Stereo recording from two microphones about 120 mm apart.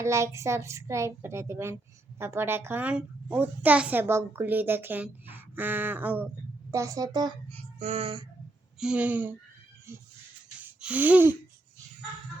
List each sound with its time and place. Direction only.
0.0 s a child's voice: 25° right (ahead or behind)
6.7 s a woman's voice: 25° right (ahead or behind)
7.8 s child singing: 70° right (ahead or behind)
8.8 s a child's voice: 10° right (ahead or behind)
10.8 s a sound: 10° right (ahead or behind)